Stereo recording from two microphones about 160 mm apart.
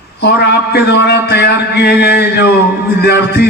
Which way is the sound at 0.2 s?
90° left.